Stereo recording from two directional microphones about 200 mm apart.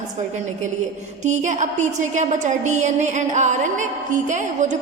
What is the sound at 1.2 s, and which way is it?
A woman's voice, 35° right (ahead or behind).